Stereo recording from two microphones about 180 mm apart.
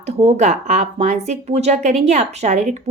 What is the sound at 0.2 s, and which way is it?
Speech, 35° right (ahead or behind).